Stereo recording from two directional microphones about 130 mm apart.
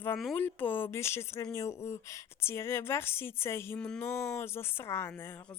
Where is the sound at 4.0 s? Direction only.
20° left (ahead or behind).